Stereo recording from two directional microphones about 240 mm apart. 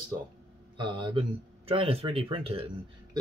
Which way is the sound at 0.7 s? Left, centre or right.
Centre.